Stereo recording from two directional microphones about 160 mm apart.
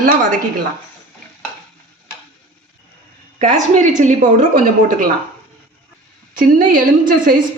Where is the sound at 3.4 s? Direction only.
50° right (ahead or behind).